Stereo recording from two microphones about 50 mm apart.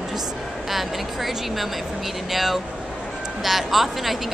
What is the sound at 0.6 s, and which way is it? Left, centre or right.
Speech, centre.